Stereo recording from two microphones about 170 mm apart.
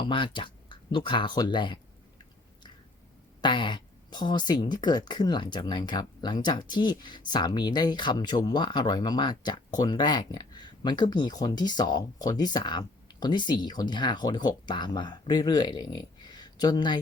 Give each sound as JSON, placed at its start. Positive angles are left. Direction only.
{"t": 0.0, "sound": "speech", "side_deg": 30}
{"t": 3.4, "sound": "speech", "side_deg": 25}